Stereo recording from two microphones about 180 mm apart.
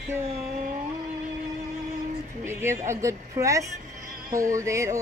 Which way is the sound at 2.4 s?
15° right (ahead or behind).